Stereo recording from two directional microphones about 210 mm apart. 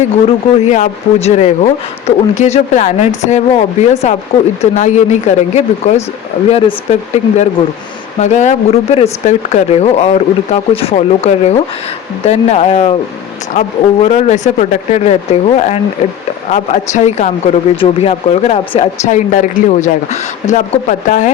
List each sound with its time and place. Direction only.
0.3 s a man's voice: 35° left (ahead or behind)